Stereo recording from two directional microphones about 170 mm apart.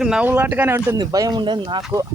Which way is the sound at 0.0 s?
5° right (ahead or behind).